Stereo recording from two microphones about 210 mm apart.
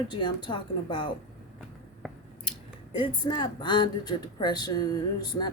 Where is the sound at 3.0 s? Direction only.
20° left (ahead or behind).